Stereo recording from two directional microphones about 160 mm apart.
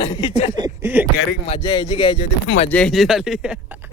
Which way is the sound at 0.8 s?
15° right (ahead or behind).